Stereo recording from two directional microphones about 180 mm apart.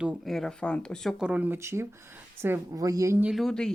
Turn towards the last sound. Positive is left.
turn(degrees=5)  # may be behind; listen again after turning